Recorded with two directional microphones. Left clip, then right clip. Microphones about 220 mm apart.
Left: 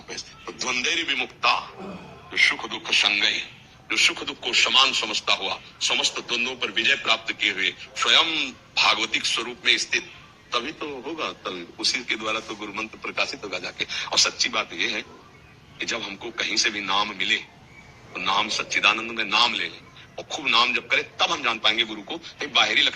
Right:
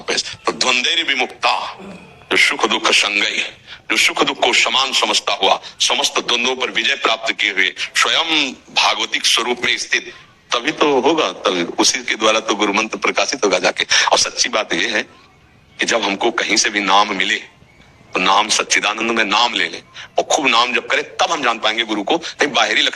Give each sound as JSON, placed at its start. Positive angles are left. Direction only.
{"t": 0.1, "sound": "a man's voice", "side_deg": -40}
{"t": 2.3, "sound": "a man's voice", "side_deg": -50}